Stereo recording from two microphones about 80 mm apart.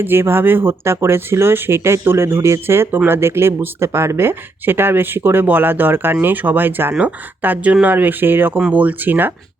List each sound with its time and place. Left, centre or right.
0.0 s speech: right